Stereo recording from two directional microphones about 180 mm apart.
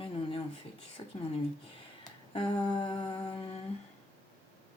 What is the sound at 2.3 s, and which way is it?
Humming, 30° left (ahead or behind).